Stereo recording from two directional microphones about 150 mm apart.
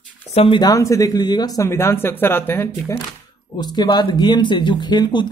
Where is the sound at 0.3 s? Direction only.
40° left (ahead or behind).